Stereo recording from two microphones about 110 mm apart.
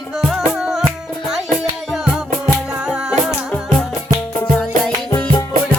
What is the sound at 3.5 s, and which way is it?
Music, 10° left (ahead or behind).